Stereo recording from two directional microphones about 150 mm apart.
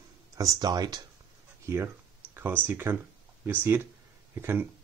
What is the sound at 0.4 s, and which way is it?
Speech, 25° right (ahead or behind).